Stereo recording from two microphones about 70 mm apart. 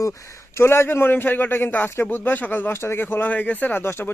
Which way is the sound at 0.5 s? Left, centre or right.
Left.